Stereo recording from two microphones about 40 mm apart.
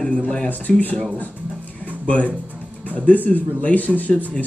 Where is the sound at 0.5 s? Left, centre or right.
Left.